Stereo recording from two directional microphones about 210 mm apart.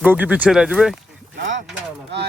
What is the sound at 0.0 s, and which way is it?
Speech, 5° right (ahead or behind).